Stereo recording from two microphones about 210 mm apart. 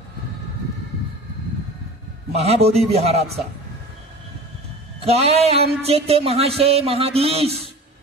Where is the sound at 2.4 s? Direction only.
30° right (ahead or behind).